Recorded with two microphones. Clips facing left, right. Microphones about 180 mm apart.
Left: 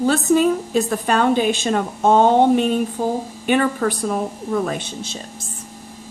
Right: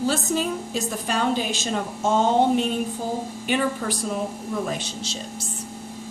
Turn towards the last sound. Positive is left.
turn(degrees=55)  # may be behind; listen again after turning